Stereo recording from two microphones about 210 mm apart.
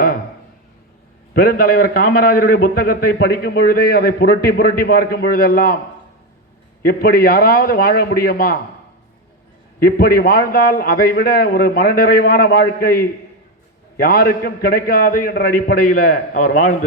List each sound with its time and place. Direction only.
1.3 s a man's voice: 45° left (ahead or behind)
6.8 s a man's voice: 45° left (ahead or behind)
9.8 s a man's voice: 45° left (ahead or behind)